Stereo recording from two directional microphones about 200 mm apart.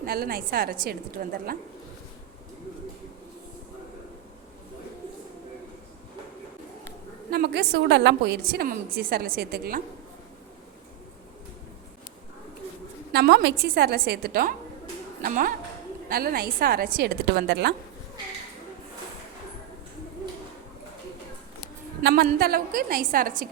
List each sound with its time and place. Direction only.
0.0 s a woman's voice: 50° right (ahead or behind)
7.3 s a woman's voice: 50° right (ahead or behind)
13.1 s a woman's voice: 55° right (ahead or behind)
22.0 s a woman's voice: 50° right (ahead or behind)